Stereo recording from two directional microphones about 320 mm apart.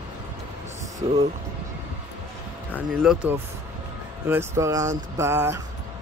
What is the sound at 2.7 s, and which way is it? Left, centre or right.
Speech, centre.